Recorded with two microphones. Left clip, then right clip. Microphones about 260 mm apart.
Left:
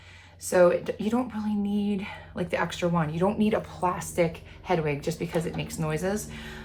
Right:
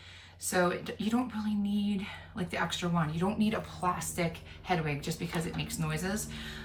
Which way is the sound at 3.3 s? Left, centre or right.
Centre.